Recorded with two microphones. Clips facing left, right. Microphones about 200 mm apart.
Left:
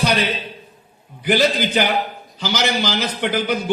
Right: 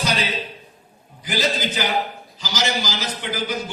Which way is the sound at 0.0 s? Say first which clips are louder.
Left 4 dB; 60° left (ahead or behind).